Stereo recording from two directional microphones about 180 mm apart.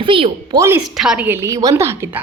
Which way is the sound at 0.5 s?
15° right (ahead or behind).